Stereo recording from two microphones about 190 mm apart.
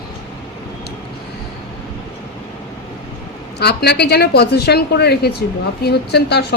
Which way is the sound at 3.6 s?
60° left (ahead or behind).